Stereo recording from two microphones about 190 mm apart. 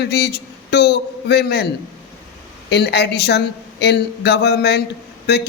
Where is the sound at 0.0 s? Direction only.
60° left (ahead or behind).